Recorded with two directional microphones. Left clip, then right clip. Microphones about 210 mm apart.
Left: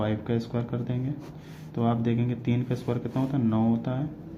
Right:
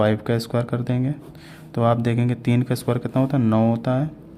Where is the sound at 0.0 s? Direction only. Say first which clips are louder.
Right 9 dB; 55° right (ahead or behind).